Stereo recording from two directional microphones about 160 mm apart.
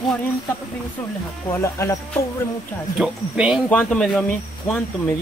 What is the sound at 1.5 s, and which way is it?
Speech, 15° left (ahead or behind).